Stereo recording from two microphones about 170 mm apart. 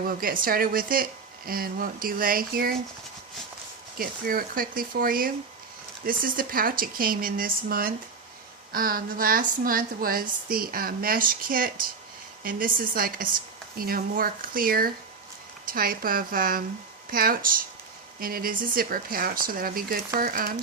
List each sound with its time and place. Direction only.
0.0 s speech: 60° right (ahead or behind)
3.9 s speech: 60° right (ahead or behind)